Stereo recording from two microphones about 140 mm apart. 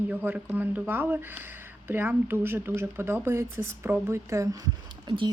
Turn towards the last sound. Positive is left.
turn(degrees=-25)  # may be behind; listen again after turning